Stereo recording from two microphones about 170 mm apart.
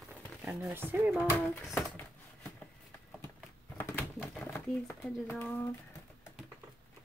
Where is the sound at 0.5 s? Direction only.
10° right (ahead or behind).